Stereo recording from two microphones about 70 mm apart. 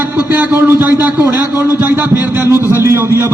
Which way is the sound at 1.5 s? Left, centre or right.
Right.